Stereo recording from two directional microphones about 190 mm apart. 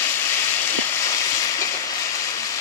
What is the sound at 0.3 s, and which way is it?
Vehicle, 15° left (ahead or behind).